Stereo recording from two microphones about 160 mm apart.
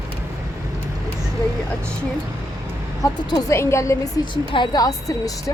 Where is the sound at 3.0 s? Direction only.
25° left (ahead or behind).